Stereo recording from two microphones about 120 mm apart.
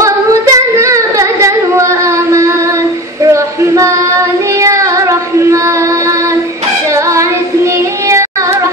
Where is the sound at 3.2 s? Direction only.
25° right (ahead or behind).